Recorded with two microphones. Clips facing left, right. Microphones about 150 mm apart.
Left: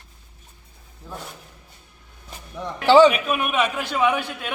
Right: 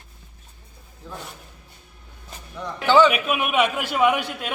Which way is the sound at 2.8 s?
35° left (ahead or behind).